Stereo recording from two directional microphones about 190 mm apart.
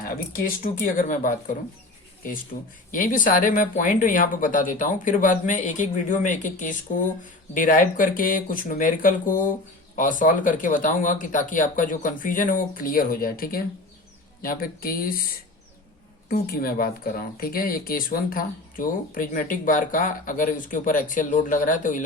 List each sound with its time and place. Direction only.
0.0 s speech: 50° left (ahead or behind)
2.9 s speech: 45° left (ahead or behind)
16.3 s speech: 50° left (ahead or behind)